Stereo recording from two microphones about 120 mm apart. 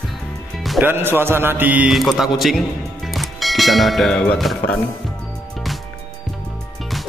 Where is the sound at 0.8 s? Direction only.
20° right (ahead or behind).